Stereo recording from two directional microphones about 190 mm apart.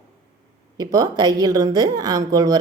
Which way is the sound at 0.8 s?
20° right (ahead or behind).